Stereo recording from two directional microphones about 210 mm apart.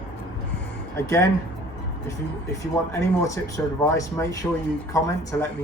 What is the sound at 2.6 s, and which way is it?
A man's voice, 15° left (ahead or behind).